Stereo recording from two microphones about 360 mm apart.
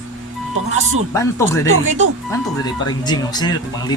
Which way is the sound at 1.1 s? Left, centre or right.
Centre.